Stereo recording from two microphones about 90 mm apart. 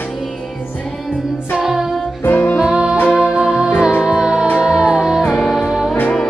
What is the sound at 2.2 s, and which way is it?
Music, 15° left (ahead or behind).